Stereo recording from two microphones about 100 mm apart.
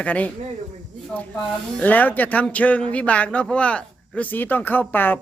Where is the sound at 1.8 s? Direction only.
15° left (ahead or behind).